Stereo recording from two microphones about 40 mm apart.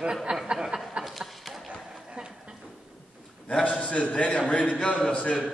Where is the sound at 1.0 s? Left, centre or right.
Centre.